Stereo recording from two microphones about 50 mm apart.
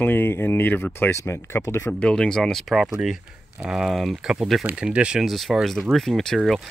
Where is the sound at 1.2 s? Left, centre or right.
Left.